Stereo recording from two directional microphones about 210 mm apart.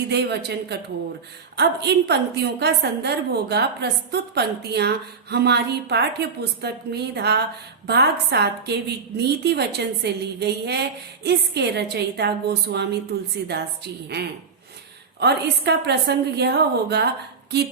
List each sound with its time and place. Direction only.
0.1 s a woman's voice: 50° right (ahead or behind)